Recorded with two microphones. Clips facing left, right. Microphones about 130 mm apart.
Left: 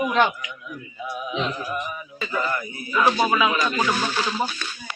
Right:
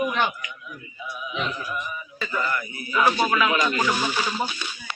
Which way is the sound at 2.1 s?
15° left (ahead or behind).